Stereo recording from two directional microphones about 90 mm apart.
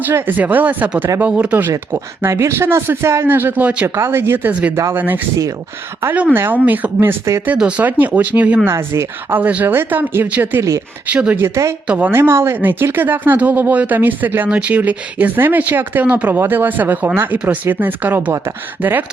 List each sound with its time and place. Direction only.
0.0 s speech: 25° right (ahead or behind)
1.9 s speech: 30° right (ahead or behind)
3.8 s speech: 25° right (ahead or behind)
7.4 s speech: 15° right (ahead or behind)
8.7 s a woman's voice: 35° right (ahead or behind)
9.3 s speech: 15° right (ahead or behind)
10.6 s a woman's voice: 35° right (ahead or behind)
11.0 s speech: 15° right (ahead or behind)
11.4 s a woman's voice: 35° right (ahead or behind)
11.9 s speech: 15° right (ahead or behind)
12.1 s speech: 30° right (ahead or behind)